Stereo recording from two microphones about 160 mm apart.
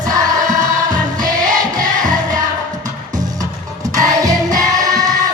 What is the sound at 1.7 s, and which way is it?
Music, 25° right (ahead or behind).